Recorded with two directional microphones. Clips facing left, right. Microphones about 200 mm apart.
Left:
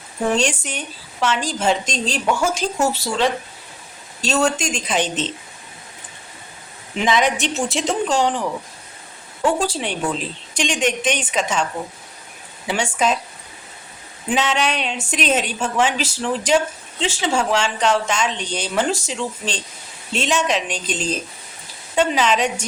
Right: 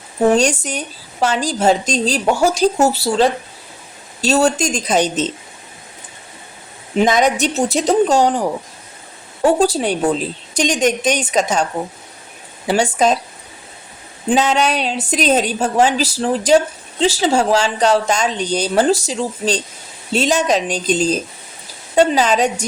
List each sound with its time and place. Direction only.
0.3 s a woman's voice: 40° right (ahead or behind)
6.9 s a woman's voice: 40° right (ahead or behind)
14.3 s a woman's voice: 35° right (ahead or behind)